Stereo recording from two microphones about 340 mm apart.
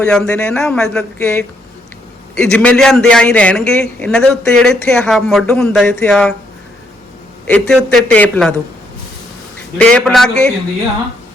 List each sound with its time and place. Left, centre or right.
0.0 s a man's voice: centre
7.5 s a man's voice: centre
9.7 s a man's voice: centre